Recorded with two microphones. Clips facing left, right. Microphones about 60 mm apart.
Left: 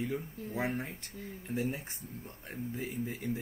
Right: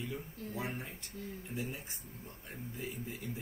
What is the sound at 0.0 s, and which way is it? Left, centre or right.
A man's voice, left.